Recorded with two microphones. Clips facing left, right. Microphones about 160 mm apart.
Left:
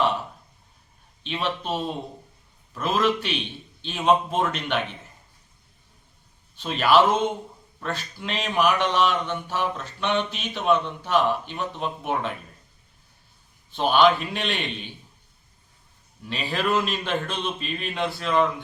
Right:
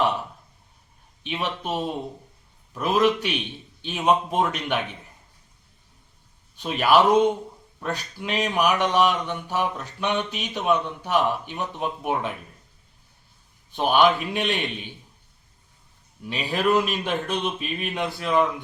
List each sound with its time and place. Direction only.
1.2 s mantra: 15° right (ahead or behind)
6.6 s mantra: 15° right (ahead or behind)
13.7 s mantra: 15° right (ahead or behind)
16.3 s mantra: 15° right (ahead or behind)